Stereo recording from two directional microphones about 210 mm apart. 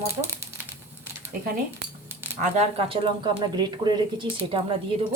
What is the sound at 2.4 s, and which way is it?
Speech, 30° right (ahead or behind).